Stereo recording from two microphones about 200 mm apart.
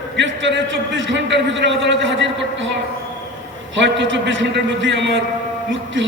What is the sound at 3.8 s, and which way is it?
A man's voice, 70° right (ahead or behind).